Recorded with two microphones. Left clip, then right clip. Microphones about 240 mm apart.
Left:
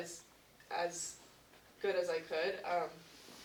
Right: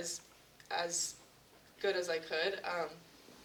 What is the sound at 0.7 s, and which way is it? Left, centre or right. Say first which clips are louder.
Speech: right 2 dB; right.